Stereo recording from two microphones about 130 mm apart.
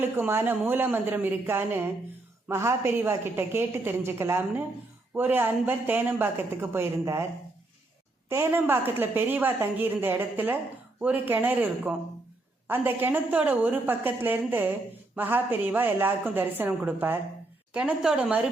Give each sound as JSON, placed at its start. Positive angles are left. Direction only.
{"t": 0.0, "sound": "a woman's voice", "side_deg": -15}
{"t": 8.3, "sound": "a woman's voice", "side_deg": -20}